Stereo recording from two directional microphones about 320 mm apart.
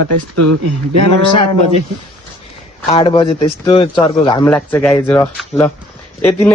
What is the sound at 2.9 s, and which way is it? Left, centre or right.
Speech, centre.